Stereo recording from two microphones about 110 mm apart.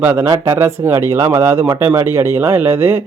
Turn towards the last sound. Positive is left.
turn(degrees=-20)  # may be behind; listen again after turning